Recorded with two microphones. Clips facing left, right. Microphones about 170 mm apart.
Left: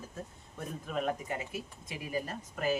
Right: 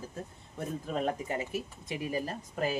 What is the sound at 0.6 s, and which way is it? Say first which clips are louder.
Speech: right 3 dB; 35° right (ahead or behind).